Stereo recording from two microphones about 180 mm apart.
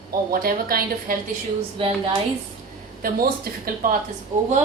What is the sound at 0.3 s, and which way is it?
Speech, 55° right (ahead or behind).